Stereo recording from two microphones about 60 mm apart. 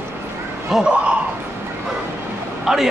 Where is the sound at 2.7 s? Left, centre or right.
Centre.